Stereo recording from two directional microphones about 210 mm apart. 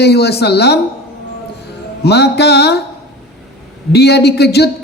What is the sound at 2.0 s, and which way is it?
Speech, 50° left (ahead or behind).